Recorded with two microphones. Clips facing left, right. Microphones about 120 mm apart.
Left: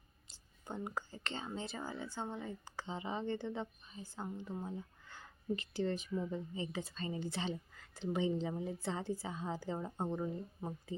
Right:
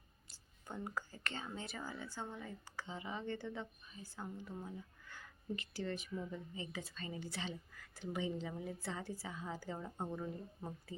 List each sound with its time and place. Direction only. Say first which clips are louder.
0.3 s speech: left 4 dB; 20° left (ahead or behind)